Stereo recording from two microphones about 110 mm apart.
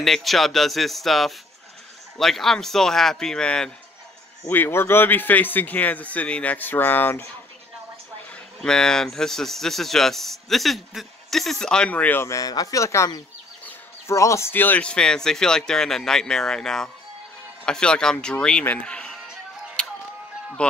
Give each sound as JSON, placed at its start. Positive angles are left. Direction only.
{"t": 0.0, "sound": "speech", "side_deg": 0}
{"t": 4.5, "sound": "a man's voice", "side_deg": 20}
{"t": 8.6, "sound": "a man's voice", "side_deg": 5}